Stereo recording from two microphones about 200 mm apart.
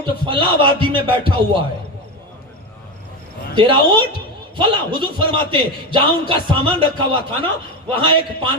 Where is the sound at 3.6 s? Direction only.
25° right (ahead or behind).